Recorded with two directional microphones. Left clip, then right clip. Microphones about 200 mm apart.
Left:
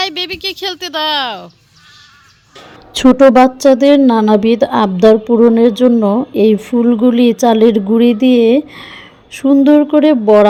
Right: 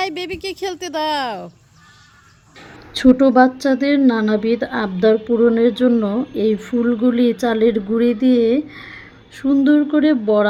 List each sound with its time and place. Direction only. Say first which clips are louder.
0.0 s speech: left 6 dB; 5° right (ahead or behind)
2.9 s speech: left 6 dB; 30° left (ahead or behind)